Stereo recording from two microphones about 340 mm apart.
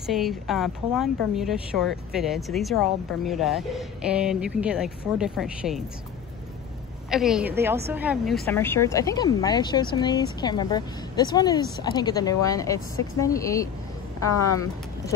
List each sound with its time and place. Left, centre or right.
0.0 s speech: centre
7.1 s a woman's voice: centre